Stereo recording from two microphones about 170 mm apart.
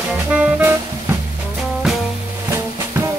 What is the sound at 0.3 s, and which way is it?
Music, 10° right (ahead or behind).